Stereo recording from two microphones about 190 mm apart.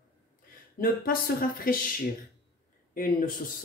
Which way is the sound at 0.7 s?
50° left (ahead or behind).